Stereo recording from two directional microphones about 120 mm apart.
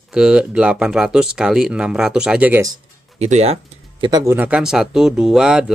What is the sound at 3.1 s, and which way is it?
Speech, 65° right (ahead or behind).